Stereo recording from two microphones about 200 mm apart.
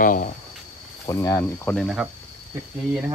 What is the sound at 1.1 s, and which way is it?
Speech, 15° left (ahead or behind).